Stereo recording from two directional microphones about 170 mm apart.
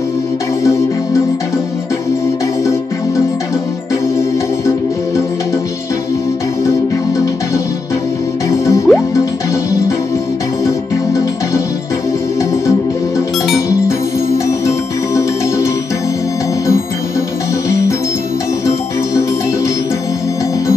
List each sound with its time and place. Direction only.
8.5 s music: 15° left (ahead or behind)
17.6 s organ: 20° left (ahead or behind)